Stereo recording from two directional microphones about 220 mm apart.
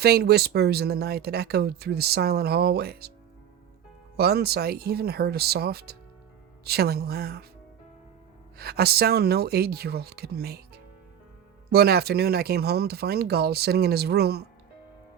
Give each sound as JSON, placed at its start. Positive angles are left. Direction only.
{"t": 0.0, "sound": "speech", "side_deg": -45}
{"t": 4.2, "sound": "speech", "side_deg": -45}
{"t": 8.5, "sound": "speech", "side_deg": -45}
{"t": 11.7, "sound": "speech", "side_deg": -45}